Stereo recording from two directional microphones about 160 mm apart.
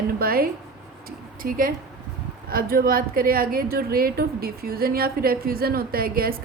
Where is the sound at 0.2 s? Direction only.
70° right (ahead or behind).